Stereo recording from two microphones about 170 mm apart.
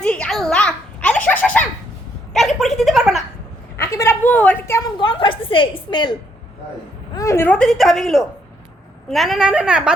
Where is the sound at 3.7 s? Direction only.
15° left (ahead or behind).